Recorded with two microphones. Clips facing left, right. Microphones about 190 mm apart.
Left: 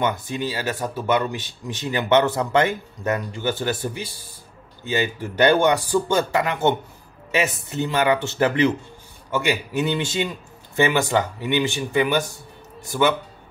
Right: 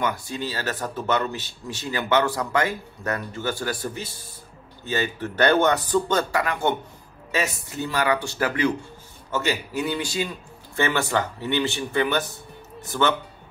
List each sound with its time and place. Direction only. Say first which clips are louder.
0.0 s speech: left 3 dB; 20° left (ahead or behind)
7.7 s speech: left 3 dB; 20° left (ahead or behind)